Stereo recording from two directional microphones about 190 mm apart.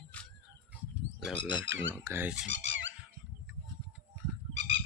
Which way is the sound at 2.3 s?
75° right (ahead or behind).